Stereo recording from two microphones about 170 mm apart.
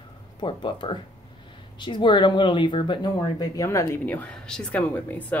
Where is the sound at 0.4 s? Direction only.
25° left (ahead or behind).